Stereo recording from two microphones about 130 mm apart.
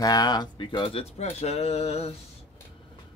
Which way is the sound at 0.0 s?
30° left (ahead or behind).